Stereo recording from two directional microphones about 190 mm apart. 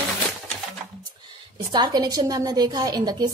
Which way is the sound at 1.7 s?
25° right (ahead or behind).